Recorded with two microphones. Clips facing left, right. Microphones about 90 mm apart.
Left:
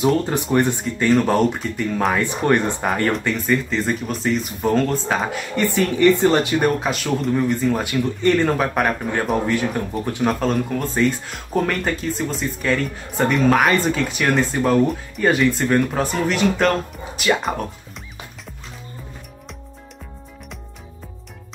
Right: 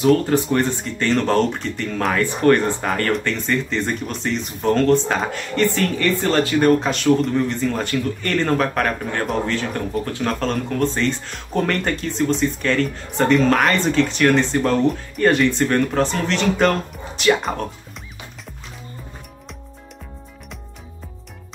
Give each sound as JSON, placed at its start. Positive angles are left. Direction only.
{"t": 0.0, "sound": "speech", "side_deg": 20}
{"t": 6.8, "sound": "speech", "side_deg": 5}